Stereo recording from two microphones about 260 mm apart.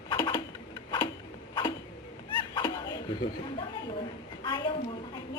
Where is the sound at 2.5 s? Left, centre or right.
Centre.